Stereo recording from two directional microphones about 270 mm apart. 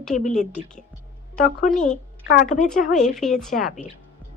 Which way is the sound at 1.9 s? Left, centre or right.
Left.